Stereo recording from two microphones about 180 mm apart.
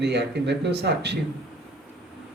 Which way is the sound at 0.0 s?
70° right (ahead or behind).